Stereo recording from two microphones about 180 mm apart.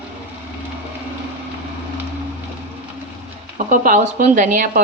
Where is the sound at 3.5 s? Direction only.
45° right (ahead or behind).